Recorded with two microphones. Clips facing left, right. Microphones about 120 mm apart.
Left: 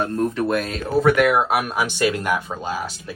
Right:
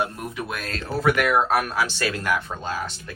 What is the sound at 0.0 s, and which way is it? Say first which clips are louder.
Speech: left 7 dB; 15° right (ahead or behind).